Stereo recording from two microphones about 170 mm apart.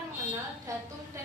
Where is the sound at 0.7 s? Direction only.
20° right (ahead or behind).